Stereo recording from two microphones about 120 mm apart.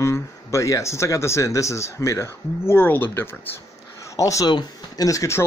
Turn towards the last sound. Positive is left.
turn(degrees=25)  # may be behind; listen again after turning